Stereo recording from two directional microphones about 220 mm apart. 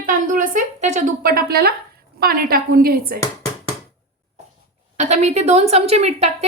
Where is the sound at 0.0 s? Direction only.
35° right (ahead or behind).